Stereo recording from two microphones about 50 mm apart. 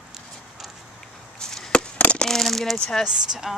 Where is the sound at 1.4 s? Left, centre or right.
Centre.